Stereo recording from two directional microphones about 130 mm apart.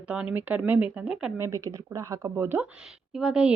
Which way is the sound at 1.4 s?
25° right (ahead or behind).